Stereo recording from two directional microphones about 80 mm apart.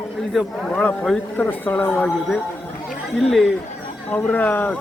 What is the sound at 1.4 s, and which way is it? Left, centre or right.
Speech, left.